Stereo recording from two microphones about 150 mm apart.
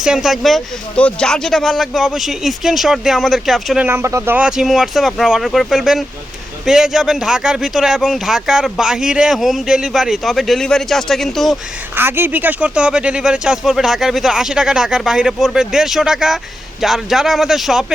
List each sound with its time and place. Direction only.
0.0 s speech: 5° right (ahead or behind)
3.8 s speech: 20° right (ahead or behind)
4.4 s speech: 5° right (ahead or behind)
11.9 s speech: 15° right (ahead or behind)